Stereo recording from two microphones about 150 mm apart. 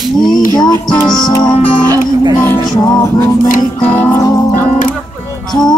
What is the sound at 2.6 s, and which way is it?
Music, 25° left (ahead or behind).